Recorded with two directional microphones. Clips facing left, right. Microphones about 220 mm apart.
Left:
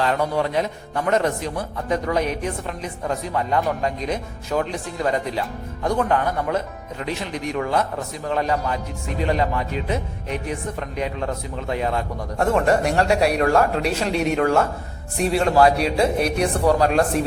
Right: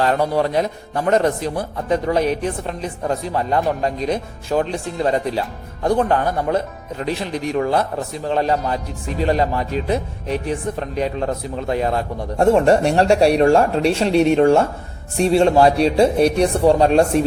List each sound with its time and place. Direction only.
0.0 s speech: 35° right (ahead or behind)